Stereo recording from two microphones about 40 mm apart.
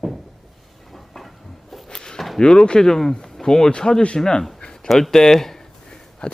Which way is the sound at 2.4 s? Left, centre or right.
Centre.